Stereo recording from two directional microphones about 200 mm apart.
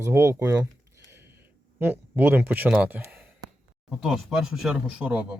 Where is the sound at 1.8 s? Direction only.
10° right (ahead or behind).